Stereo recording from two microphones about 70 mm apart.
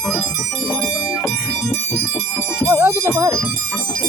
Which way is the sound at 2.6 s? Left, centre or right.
Right.